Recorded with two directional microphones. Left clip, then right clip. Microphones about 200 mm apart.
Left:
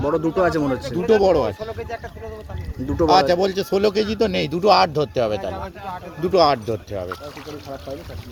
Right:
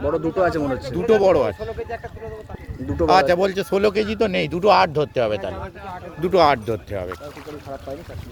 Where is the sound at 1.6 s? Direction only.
50° left (ahead or behind).